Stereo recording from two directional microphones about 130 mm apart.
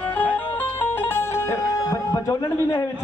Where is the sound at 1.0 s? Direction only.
15° left (ahead or behind).